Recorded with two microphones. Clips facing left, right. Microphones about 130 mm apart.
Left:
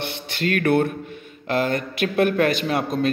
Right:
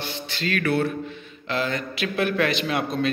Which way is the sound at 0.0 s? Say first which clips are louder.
Left 4 dB; 60° left (ahead or behind).